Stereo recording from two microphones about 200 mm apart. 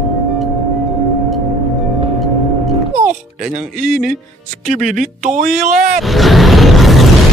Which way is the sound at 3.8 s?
40° right (ahead or behind).